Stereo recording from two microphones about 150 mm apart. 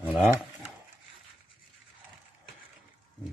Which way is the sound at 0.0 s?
10° right (ahead or behind).